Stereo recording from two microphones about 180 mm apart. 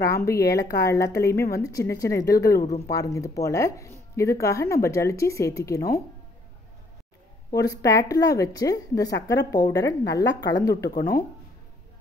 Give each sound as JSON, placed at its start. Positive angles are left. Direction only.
{"t": 0.0, "sound": "speech", "side_deg": 15}
{"t": 7.5, "sound": "a woman's voice", "side_deg": 20}